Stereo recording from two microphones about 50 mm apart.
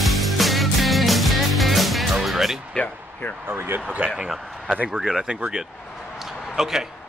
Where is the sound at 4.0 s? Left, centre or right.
Right.